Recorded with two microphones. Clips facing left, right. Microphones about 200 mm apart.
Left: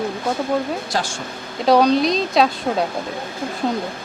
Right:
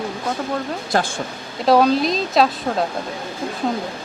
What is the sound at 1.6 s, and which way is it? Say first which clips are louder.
Speech: left 1 dB; centre (ahead or behind).